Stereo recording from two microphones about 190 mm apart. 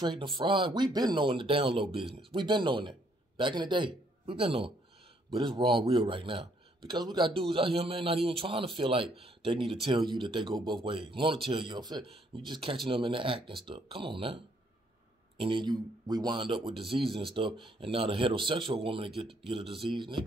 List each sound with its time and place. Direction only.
0.0 s speech: 25° right (ahead or behind)